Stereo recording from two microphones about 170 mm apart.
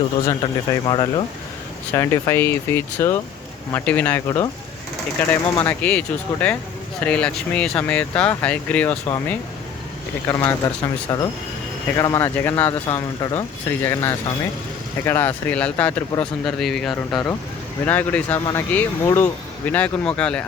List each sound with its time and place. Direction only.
0.3 s speech: 25° left (ahead or behind)
9.0 s speech: 20° left (ahead or behind)